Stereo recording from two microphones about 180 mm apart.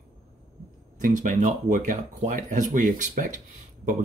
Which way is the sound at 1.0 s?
45° right (ahead or behind).